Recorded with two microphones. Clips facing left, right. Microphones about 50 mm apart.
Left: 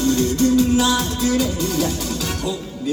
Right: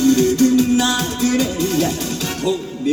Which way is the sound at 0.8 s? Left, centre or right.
Right.